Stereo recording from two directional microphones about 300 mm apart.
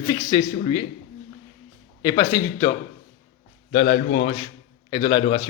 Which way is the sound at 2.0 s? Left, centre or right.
Centre.